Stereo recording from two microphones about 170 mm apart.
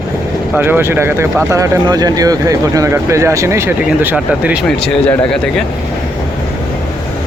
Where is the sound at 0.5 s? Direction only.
10° right (ahead or behind).